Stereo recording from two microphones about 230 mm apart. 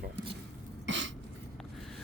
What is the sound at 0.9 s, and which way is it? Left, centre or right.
Cough, right.